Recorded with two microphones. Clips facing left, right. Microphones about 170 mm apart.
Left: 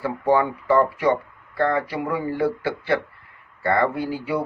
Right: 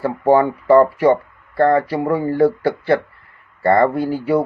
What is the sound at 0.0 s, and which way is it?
Speech, 45° right (ahead or behind).